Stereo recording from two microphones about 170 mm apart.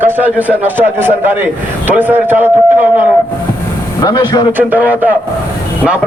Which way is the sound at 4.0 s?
25° left (ahead or behind).